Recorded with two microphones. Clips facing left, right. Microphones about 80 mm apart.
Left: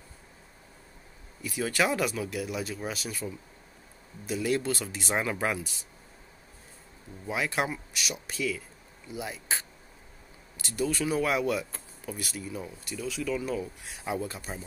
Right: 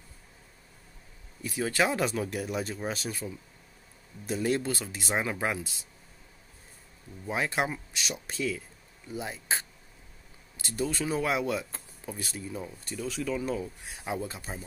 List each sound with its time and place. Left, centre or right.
1.4 s speech: right
4.3 s speech: right
7.2 s speech: right